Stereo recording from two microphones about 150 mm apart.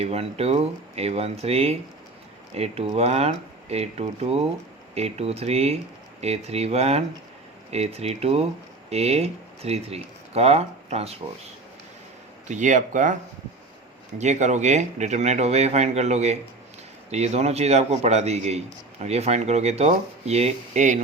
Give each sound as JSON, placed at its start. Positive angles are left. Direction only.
{"t": 0.0, "sound": "speech", "side_deg": -45}
{"t": 12.5, "sound": "speech", "side_deg": -55}
{"t": 14.2, "sound": "speech", "side_deg": -50}